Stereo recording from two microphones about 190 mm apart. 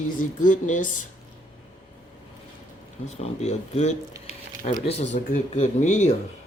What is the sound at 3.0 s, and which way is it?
Speech, 35° left (ahead or behind).